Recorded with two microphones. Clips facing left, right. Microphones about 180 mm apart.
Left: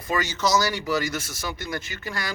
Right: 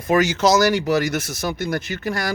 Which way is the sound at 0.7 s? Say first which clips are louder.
Right 7 dB; 75° right (ahead or behind).